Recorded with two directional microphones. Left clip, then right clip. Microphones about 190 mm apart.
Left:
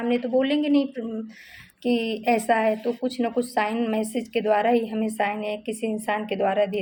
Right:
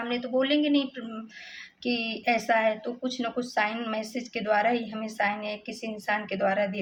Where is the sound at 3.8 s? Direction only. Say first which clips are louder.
Left 6 dB; 45° left (ahead or behind).